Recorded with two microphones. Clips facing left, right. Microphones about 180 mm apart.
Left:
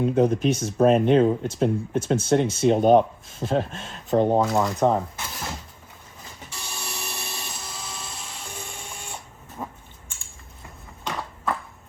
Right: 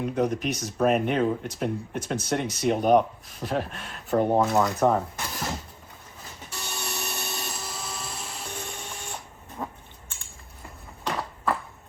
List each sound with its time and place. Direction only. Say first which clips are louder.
0.0 s speech: left 6 dB; 30° left (ahead or behind)
4.5 s speech: even; centre (ahead or behind)
5.2 s a sound: right 2 dB; centre (ahead or behind)
6.5 s tools: right 2 dB; centre (ahead or behind)
9.6 s dog: even; 10° left (ahead or behind)
11.0 s a sound: right 1 dB; centre (ahead or behind)